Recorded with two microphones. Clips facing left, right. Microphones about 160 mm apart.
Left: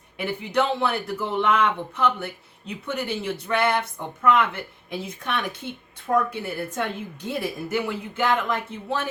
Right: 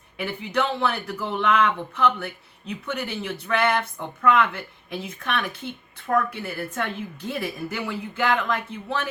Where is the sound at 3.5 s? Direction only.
10° left (ahead or behind).